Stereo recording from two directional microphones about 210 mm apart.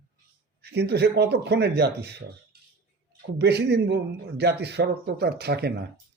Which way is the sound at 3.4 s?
55° right (ahead or behind).